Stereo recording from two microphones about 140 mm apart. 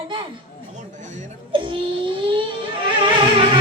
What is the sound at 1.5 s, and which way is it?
Wail, 35° right (ahead or behind).